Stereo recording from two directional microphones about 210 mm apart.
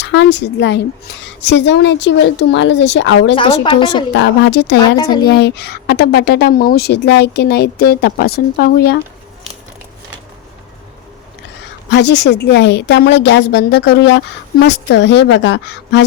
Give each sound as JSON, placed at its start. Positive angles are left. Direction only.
{"t": 0.0, "sound": "speech", "side_deg": 55}
{"t": 3.3, "sound": "speech", "side_deg": 25}
{"t": 4.1, "sound": "speech", "side_deg": 55}
{"t": 4.9, "sound": "speech", "side_deg": 20}
{"t": 5.3, "sound": "a woman's voice", "side_deg": 55}
{"t": 11.9, "sound": "speech", "side_deg": 55}